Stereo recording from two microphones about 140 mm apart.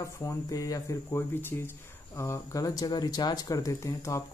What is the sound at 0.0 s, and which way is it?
Speech, 25° left (ahead or behind).